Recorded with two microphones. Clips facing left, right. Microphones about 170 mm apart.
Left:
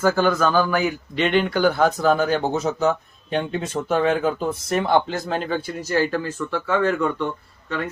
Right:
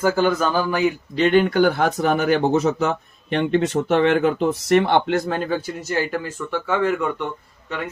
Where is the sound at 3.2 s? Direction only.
90° right; by 5.3 s 70° right (ahead or behind).